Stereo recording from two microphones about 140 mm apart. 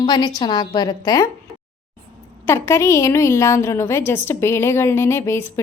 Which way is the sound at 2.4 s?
20° left (ahead or behind).